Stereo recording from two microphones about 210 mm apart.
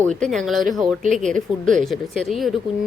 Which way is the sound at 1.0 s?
35° right (ahead or behind).